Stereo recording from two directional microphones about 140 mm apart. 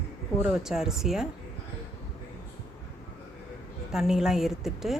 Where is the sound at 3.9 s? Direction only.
5° right (ahead or behind).